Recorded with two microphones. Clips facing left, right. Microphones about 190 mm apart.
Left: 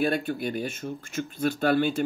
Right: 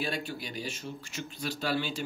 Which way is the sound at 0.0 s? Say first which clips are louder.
Left 9 dB; 55° left (ahead or behind).